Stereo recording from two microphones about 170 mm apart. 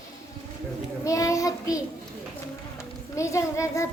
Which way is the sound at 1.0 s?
20° left (ahead or behind).